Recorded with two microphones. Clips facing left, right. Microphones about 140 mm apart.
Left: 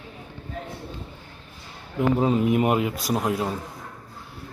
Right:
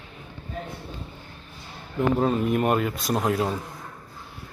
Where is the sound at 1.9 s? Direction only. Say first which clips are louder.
Left 1 dB; 10° left (ahead or behind).